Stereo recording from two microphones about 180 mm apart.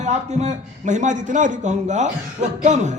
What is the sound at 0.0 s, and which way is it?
A man's voice, 40° right (ahead or behind).